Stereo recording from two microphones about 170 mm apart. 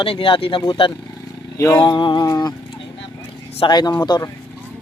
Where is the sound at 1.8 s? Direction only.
25° left (ahead or behind).